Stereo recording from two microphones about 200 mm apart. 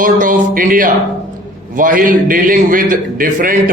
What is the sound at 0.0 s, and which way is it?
A man's voice, 45° right (ahead or behind).